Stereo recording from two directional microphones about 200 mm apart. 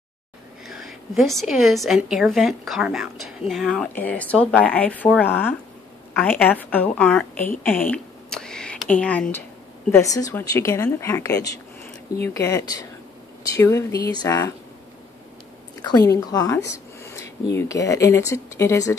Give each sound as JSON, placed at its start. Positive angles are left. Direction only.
{"t": 0.7, "sound": "a woman's voice", "side_deg": 0}
{"t": 7.6, "sound": "a sound", "side_deg": 10}
{"t": 9.0, "sound": "a woman's voice", "side_deg": 5}
{"t": 15.8, "sound": "a woman's voice", "side_deg": 15}